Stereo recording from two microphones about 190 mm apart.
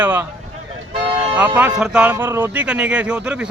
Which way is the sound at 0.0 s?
10° right (ahead or behind).